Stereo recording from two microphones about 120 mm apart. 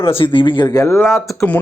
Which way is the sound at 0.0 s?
50° left (ahead or behind).